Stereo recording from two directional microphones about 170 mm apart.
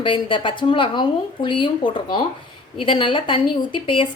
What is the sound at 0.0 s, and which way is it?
A woman's voice, 30° left (ahead or behind).